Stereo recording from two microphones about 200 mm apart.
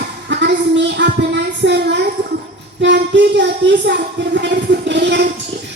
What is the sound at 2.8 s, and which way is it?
Speech, 60° right (ahead or behind).